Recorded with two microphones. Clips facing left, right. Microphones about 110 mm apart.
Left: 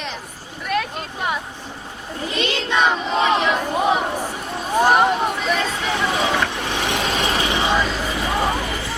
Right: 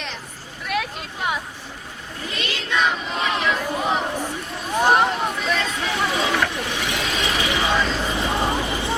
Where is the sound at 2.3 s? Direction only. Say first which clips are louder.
Left 5 dB; 25° left (ahead or behind).